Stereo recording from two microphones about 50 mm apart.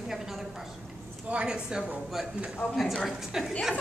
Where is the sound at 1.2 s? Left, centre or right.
Centre.